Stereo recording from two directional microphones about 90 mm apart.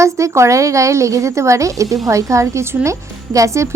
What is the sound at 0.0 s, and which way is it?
A woman's voice, 35° right (ahead or behind).